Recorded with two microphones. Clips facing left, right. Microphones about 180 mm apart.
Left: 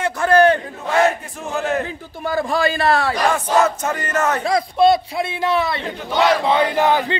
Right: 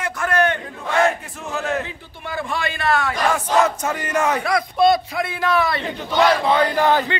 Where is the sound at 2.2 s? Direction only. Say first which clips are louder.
Left 7 dB; 40° left (ahead or behind).